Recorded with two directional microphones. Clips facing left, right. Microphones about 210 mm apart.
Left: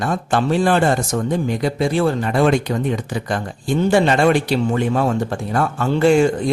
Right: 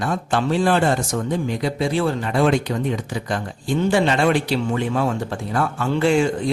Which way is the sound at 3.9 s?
45° left (ahead or behind).